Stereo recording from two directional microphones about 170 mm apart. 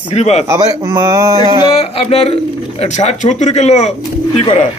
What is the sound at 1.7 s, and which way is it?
Speech, 35° left (ahead or behind).